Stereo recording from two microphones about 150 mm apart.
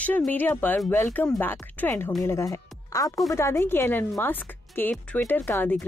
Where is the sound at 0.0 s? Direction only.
10° left (ahead or behind).